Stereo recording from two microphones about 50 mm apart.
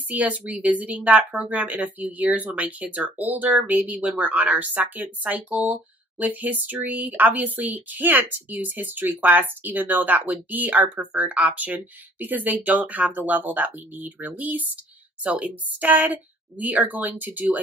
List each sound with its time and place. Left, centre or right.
0.1 s speech: right
15.2 s a woman's voice: right
15.8 s speech: right